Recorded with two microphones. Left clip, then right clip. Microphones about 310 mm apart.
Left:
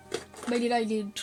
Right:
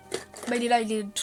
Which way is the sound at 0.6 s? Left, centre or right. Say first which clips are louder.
Right 4 dB; right.